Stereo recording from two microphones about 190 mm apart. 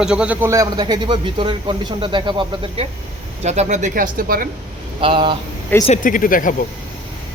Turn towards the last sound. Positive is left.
turn(degrees=45)  # may be behind; listen again after turning